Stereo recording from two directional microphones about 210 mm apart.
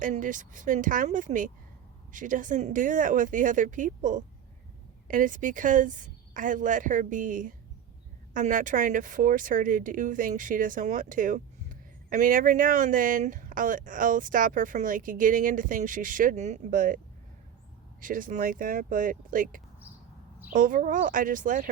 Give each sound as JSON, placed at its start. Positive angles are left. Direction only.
{"t": 0.0, "sound": "speech", "side_deg": -40}
{"t": 18.0, "sound": "speech", "side_deg": -40}